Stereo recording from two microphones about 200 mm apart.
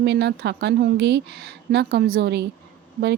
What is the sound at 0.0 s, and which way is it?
Speech, 55° right (ahead or behind).